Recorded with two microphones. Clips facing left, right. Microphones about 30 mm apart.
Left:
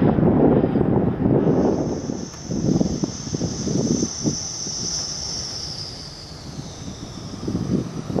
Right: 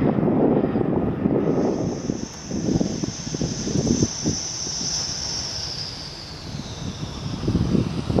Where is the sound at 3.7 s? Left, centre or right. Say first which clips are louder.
Even; centre.